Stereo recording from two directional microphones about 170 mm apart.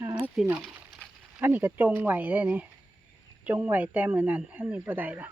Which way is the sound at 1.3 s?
10° right (ahead or behind).